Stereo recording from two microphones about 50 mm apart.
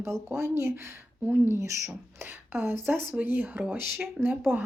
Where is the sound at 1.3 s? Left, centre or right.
Right.